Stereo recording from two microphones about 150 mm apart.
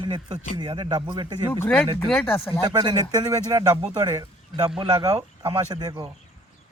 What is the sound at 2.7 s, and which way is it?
Speech, 30° right (ahead or behind).